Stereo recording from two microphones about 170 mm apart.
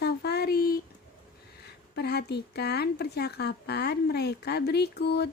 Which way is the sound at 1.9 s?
75° left (ahead or behind).